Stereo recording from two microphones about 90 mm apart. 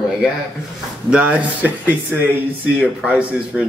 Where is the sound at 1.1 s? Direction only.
10° right (ahead or behind).